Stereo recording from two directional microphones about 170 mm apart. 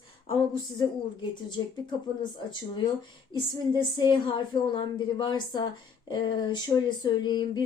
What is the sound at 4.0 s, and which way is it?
A woman's voice, 25° left (ahead or behind).